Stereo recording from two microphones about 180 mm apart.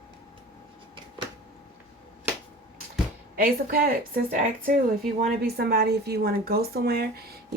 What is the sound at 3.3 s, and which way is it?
A woman's voice, 55° right (ahead or behind).